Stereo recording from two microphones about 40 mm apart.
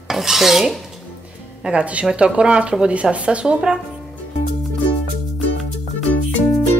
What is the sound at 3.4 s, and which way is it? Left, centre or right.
Speech, centre.